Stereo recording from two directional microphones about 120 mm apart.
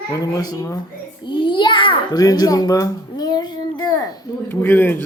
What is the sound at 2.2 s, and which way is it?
A child's voice, 30° left (ahead or behind).